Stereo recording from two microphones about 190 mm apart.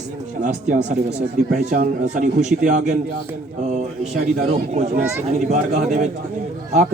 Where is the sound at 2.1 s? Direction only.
40° right (ahead or behind).